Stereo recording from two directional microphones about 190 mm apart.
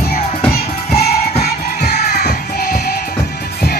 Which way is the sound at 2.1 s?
55° left (ahead or behind).